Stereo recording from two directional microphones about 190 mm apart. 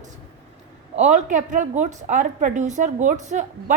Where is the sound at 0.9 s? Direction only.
40° right (ahead or behind).